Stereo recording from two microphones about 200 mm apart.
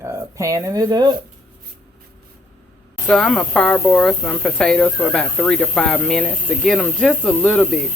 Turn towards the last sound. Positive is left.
turn(degrees=0)  # may be behind; listen again after turning